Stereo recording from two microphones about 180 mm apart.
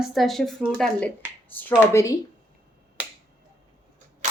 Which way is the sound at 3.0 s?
10° right (ahead or behind).